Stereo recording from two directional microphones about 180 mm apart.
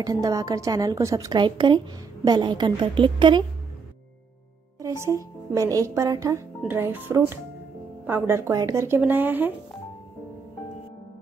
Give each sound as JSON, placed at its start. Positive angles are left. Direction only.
{"t": 0.0, "sound": "a woman's voice", "side_deg": -20}
{"t": 4.8, "sound": "a woman's voice", "side_deg": -15}